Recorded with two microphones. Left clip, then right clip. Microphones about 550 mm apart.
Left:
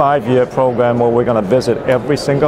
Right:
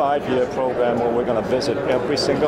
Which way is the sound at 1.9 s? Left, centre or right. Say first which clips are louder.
Left 4 dB; left.